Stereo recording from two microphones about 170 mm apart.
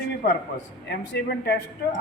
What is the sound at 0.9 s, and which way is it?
Speech, 80° left.